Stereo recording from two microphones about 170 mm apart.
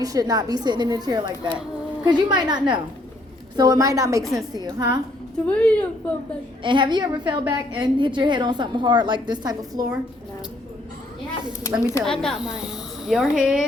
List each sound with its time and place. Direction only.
0.0 s a woman's voice: 20° right (ahead or behind)
5.5 s a woman's voice: 5° left (ahead or behind)
6.6 s a woman's voice: 30° right (ahead or behind)
11.8 s a woman's voice: 20° left (ahead or behind)
12.0 s speech: 5° left (ahead or behind)